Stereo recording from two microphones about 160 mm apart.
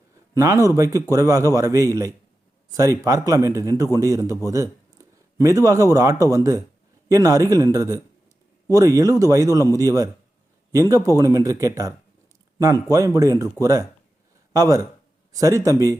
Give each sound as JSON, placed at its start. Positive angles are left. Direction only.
{"t": 0.3, "sound": "a man's voice", "side_deg": -20}